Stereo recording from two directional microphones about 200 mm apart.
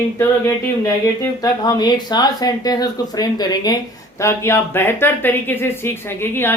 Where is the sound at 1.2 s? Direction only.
20° left (ahead or behind).